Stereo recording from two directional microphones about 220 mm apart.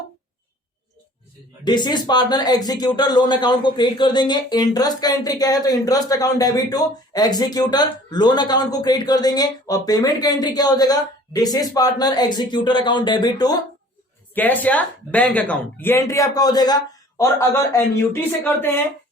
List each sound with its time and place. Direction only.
1.6 s speech: 20° left (ahead or behind)
14.3 s speech: 10° left (ahead or behind)